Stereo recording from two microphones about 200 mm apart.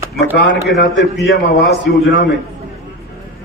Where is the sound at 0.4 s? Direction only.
60° left (ahead or behind).